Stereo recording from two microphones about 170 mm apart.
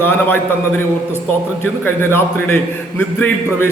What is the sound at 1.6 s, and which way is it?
A man's voice, 15° left (ahead or behind).